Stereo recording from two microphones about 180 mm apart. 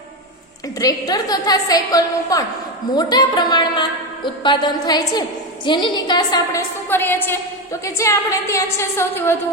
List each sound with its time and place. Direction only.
0.8 s a woman's voice: 20° left (ahead or behind)